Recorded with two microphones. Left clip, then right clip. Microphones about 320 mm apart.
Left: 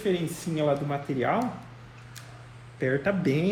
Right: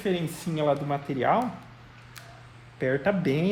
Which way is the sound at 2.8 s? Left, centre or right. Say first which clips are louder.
Right 1 dB; right.